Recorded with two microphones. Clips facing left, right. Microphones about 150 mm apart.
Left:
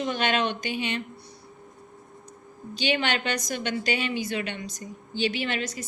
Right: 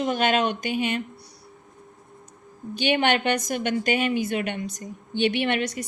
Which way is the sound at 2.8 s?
55° right (ahead or behind).